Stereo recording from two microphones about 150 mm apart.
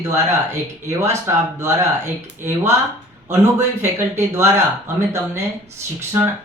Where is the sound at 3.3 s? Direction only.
20° right (ahead or behind).